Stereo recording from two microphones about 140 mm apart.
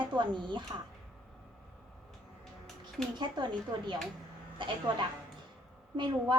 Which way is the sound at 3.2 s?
35° right (ahead or behind).